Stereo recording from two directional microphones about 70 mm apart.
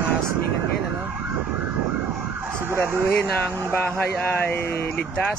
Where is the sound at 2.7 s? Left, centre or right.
Right.